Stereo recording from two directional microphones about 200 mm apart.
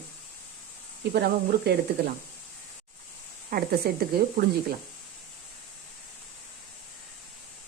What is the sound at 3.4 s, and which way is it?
Speech, 50° right (ahead or behind).